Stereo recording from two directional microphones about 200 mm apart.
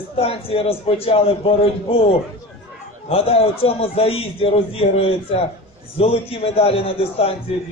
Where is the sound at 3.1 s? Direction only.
30° left (ahead or behind).